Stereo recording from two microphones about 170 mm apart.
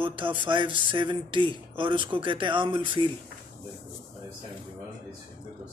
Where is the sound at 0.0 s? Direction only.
30° right (ahead or behind).